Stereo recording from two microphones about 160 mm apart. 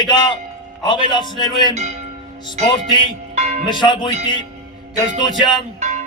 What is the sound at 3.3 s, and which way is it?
Music, 40° right (ahead or behind).